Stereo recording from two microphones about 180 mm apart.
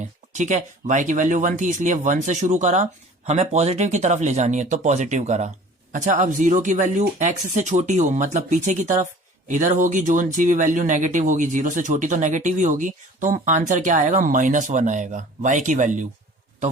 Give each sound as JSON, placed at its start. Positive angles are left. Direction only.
{"t": 0.0, "sound": "speech", "side_deg": -40}